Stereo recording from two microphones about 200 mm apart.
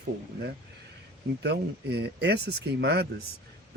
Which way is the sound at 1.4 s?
55° right (ahead or behind).